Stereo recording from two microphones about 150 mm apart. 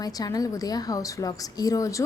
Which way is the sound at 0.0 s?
25° left (ahead or behind).